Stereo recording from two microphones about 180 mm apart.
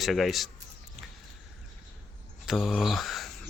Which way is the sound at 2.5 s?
Centre (ahead or behind).